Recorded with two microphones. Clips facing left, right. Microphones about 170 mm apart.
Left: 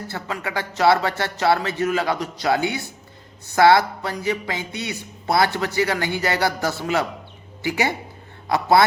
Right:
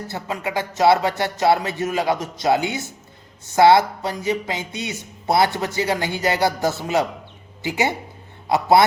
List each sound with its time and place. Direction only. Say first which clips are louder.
0.1 s speech: right 3 dB; 20° right (ahead or behind)